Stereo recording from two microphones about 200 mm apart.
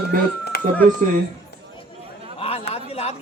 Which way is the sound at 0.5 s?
50° left (ahead or behind).